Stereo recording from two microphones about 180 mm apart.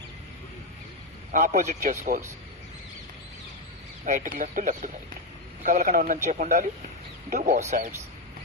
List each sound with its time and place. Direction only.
1.3 s a man's voice: 40° right (ahead or behind)
4.0 s a man's voice: 45° right (ahead or behind)